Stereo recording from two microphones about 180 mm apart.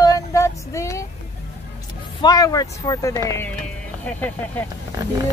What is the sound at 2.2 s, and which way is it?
Speech, 20° left (ahead or behind).